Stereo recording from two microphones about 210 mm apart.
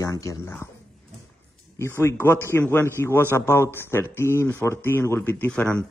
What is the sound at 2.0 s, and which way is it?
A man's voice, 10° left (ahead or behind).